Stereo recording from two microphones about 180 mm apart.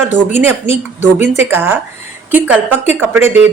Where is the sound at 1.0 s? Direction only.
15° right (ahead or behind).